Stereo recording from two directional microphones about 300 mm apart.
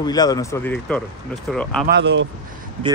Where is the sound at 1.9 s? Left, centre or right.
Right.